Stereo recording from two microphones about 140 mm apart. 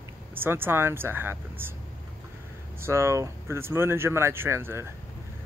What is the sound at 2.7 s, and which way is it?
Speech, 20° right (ahead or behind).